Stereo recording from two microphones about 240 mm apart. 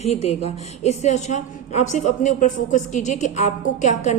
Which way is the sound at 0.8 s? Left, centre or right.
Left.